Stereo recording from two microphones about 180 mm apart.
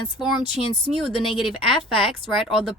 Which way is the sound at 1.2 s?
30° left (ahead or behind).